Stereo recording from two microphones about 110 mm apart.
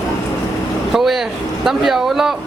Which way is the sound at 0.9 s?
Centre (ahead or behind).